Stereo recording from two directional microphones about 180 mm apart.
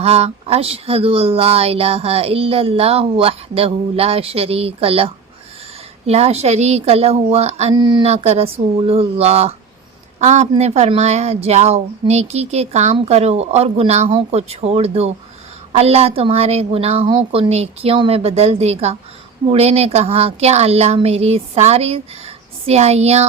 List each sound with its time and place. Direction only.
0.0 s speech: 35° right (ahead or behind)